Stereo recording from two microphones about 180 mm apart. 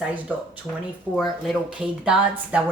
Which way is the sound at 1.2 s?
Centre (ahead or behind).